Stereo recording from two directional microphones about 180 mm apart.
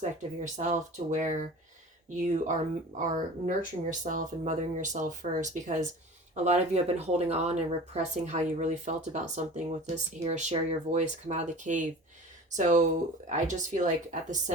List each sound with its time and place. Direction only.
0.0 s speech: 40° right (ahead or behind)